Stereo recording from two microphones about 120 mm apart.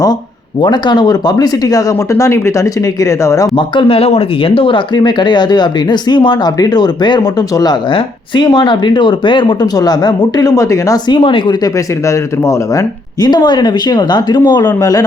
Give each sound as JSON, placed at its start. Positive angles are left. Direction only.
{"t": 0.6, "sound": "speech", "side_deg": 40}
{"t": 3.8, "sound": "speech", "side_deg": 50}
{"t": 12.0, "sound": "speech", "side_deg": 25}